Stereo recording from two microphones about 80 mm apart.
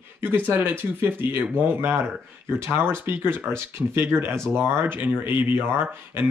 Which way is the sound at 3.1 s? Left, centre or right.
Right.